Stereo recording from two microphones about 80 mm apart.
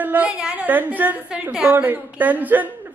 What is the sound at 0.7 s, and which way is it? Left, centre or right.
A man's voice, right.